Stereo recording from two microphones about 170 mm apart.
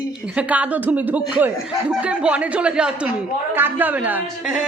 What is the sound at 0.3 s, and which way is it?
Speech, 10° right (ahead or behind).